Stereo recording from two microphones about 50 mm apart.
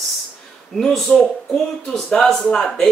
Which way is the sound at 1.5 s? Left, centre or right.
Centre.